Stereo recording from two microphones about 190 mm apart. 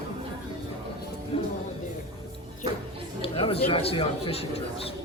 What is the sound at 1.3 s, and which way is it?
Music, 30° left (ahead or behind).